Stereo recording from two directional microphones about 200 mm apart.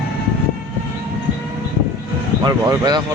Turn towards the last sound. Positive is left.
turn(degrees=-20)  # may be behind; listen again after turning